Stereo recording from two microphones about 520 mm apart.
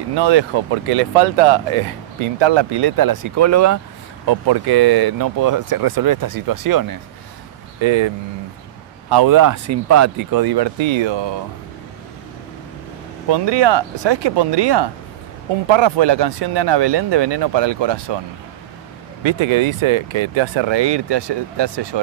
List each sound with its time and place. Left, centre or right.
0.1 s speech: right
4.3 s speech: right
7.8 s speech: right
9.1 s speech: right
13.3 s speech: right
19.2 s speech: right